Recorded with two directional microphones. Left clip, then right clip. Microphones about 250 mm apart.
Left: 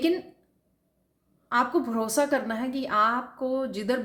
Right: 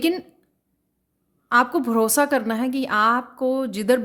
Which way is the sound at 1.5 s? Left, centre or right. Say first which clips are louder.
Right 6 dB; right.